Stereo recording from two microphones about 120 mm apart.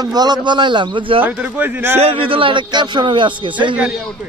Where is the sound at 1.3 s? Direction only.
15° right (ahead or behind).